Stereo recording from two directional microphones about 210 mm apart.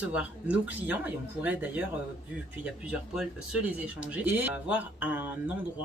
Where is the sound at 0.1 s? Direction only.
5° right (ahead or behind).